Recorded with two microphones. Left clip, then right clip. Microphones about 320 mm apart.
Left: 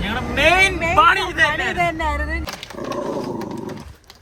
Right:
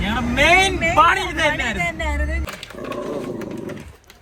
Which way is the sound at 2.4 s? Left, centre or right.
Left.